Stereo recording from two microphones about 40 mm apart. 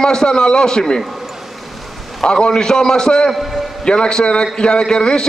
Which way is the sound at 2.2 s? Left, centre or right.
Left.